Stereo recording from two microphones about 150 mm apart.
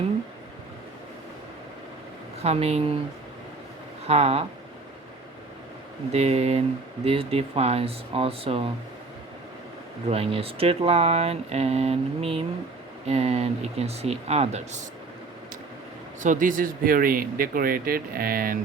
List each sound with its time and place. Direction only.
2.4 s speech: 45° right (ahead or behind)
4.0 s speech: 45° right (ahead or behind)
6.1 s speech: 45° right (ahead or behind)
10.1 s speech: 40° right (ahead or behind)
16.2 s speech: 60° right (ahead or behind)